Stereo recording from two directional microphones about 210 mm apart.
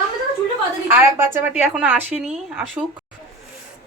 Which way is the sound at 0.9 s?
10° right (ahead or behind).